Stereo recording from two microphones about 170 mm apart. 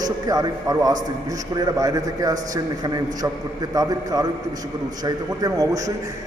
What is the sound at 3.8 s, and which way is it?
A man's voice, 20° right (ahead or behind).